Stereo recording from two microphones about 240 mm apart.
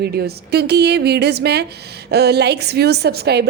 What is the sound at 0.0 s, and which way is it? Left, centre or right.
A woman's voice, right.